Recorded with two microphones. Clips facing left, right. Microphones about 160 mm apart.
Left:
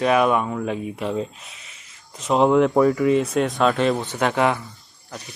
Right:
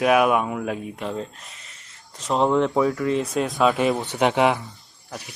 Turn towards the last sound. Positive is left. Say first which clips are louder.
# right 1 dB
turn(degrees=-20)  # may be behind; listen again after turning